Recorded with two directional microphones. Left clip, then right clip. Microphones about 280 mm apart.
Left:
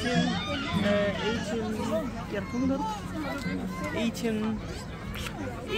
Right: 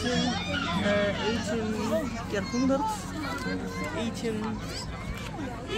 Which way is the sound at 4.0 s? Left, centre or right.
Left.